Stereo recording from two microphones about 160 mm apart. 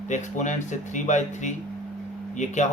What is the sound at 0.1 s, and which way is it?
Speech, 50° left (ahead or behind).